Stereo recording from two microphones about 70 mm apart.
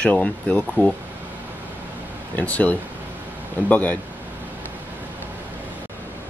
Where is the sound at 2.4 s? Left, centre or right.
Left.